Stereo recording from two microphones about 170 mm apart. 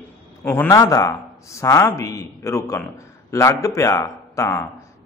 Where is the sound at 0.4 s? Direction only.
15° left (ahead or behind).